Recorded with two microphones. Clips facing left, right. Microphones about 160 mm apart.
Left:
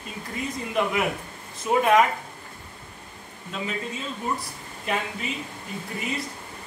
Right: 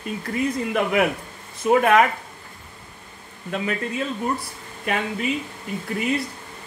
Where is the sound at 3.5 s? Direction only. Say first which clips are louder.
Right 5 dB; 65° right (ahead or behind).